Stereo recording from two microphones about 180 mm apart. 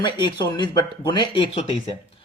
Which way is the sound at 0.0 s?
25° left (ahead or behind).